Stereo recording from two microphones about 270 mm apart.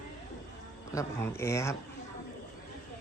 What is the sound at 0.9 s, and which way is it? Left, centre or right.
Speech, centre.